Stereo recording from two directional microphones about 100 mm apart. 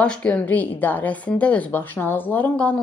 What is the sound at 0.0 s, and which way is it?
A woman's voice, 10° left (ahead or behind).